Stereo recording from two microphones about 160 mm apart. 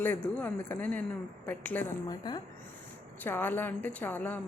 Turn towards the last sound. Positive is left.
turn(degrees=10)  # may be behind; listen again after turning